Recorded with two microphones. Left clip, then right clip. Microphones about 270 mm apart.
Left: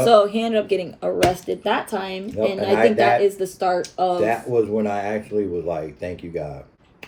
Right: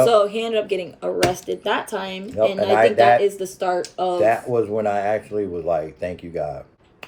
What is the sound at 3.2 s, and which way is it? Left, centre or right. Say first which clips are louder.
Speech: left 1 dB; centre.